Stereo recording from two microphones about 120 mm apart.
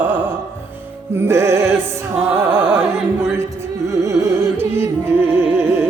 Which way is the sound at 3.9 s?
25° right (ahead or behind).